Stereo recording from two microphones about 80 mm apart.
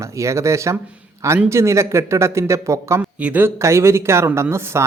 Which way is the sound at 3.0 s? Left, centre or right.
Centre.